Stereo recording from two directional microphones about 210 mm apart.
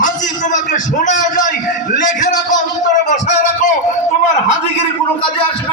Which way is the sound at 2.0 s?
35° left (ahead or behind).